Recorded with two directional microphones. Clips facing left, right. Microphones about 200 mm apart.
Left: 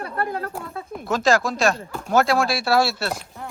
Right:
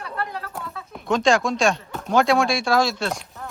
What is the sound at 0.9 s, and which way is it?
Speech, centre (ahead or behind).